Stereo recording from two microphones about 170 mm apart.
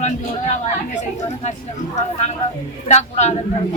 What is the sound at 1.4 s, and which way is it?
Speech, 40° left (ahead or behind).